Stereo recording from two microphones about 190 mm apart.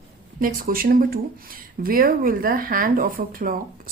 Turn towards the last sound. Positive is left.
turn(degrees=-45)  # may be behind; listen again after turning